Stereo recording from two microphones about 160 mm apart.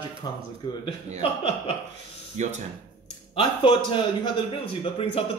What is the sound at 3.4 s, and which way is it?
Speech, 30° left (ahead or behind).